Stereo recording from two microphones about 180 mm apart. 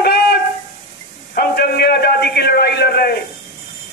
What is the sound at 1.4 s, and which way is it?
A man's voice, 60° left (ahead or behind).